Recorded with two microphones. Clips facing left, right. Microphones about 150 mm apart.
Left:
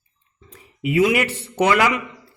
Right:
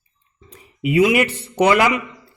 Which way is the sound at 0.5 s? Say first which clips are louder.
Right 2 dB; 20° right (ahead or behind).